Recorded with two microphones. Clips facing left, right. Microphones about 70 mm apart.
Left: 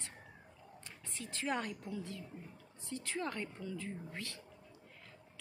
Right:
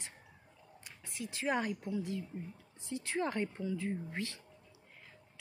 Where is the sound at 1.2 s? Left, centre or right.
Centre.